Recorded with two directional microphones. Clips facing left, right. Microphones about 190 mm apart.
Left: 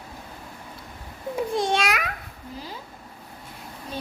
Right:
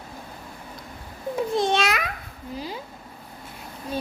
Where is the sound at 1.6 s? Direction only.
10° left (ahead or behind).